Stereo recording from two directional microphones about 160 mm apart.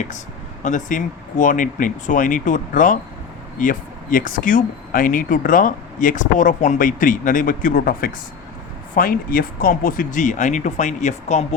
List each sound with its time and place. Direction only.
0.6 s speech: 55° left (ahead or behind)